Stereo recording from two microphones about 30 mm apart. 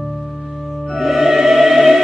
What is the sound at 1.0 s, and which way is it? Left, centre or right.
Music, centre.